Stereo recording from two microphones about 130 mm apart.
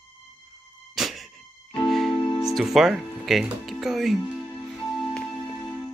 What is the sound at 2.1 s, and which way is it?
Music, 40° left (ahead or behind).